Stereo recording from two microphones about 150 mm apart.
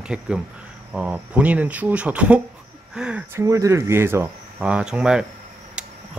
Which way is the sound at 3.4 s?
20° right (ahead or behind).